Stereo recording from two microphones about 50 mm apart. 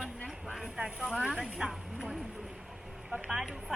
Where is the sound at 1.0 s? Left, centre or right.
Centre.